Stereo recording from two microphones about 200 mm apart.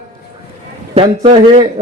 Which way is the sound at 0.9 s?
30° right (ahead or behind).